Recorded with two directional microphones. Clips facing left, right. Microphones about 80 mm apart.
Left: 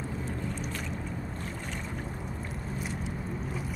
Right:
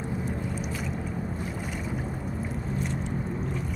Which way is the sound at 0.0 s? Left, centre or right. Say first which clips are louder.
Right 4 dB; centre.